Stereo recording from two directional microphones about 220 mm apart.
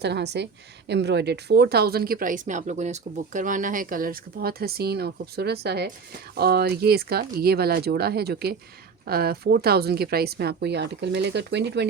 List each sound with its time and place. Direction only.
0.0 s speech: 50° right (ahead or behind)